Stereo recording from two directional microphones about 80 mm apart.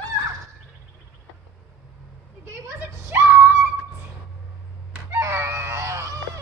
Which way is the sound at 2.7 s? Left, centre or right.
Right.